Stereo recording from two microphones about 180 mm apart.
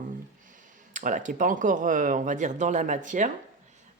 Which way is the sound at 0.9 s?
45° right (ahead or behind).